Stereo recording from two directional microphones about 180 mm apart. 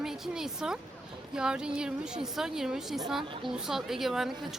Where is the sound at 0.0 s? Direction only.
Centre (ahead or behind).